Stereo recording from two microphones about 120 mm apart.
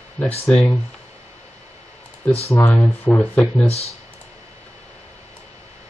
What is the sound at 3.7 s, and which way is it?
Speech, 60° left (ahead or behind).